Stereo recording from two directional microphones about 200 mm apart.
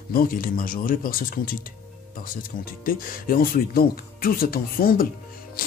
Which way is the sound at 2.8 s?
45° left (ahead or behind).